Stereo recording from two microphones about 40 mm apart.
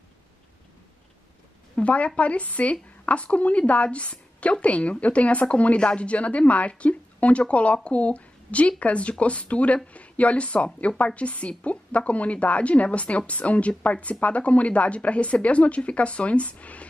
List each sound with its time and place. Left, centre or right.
1.8 s a woman's voice: left